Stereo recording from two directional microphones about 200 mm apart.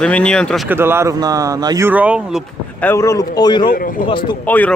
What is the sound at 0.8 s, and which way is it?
Speech, 10° right (ahead or behind).